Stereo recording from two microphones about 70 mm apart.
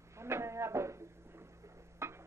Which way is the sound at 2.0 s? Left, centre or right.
Right.